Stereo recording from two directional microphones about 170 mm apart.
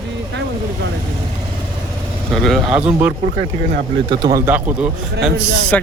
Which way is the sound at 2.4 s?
Centre (ahead or behind).